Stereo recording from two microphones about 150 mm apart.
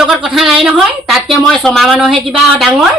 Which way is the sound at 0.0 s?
5° right (ahead or behind).